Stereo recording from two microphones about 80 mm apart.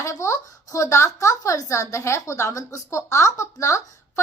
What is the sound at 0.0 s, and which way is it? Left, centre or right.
A woman's voice, left.